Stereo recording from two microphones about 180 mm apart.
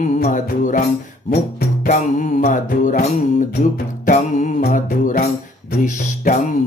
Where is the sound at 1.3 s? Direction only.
55° left (ahead or behind).